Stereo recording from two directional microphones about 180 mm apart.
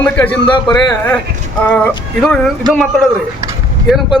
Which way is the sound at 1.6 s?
10° left (ahead or behind).